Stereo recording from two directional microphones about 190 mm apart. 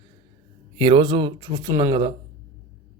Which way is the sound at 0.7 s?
25° right (ahead or behind).